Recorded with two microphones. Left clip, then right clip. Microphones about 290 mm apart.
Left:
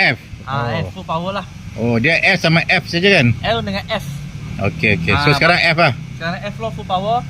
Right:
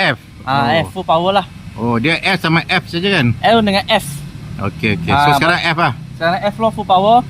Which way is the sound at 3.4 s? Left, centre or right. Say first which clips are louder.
Right 8 dB; right.